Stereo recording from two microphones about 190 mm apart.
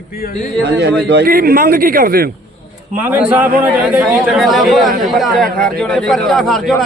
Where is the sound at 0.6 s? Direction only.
65° right (ahead or behind).